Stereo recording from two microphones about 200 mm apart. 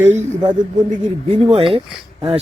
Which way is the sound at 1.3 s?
25° right (ahead or behind).